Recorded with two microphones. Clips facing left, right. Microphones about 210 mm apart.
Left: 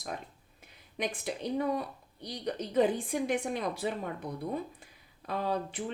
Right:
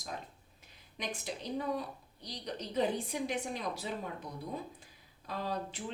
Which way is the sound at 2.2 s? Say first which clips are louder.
Left 6 dB; 55° left (ahead or behind).